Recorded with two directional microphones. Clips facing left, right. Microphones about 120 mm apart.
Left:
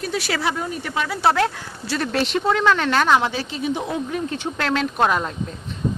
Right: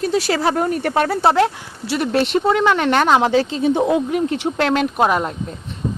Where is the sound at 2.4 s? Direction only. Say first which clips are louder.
Right 3 dB; 10° right (ahead or behind).